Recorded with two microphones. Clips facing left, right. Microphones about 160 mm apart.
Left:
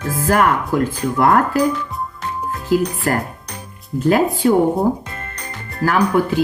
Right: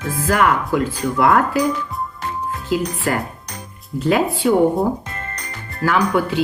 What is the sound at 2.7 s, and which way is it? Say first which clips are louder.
Speech: left 3 dB; 45° left (ahead or behind).